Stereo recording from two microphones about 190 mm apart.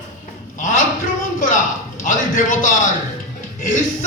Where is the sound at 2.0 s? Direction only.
45° left (ahead or behind).